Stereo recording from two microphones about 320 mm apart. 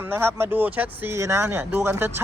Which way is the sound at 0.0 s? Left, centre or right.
Centre.